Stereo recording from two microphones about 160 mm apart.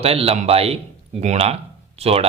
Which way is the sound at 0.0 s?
40° right (ahead or behind).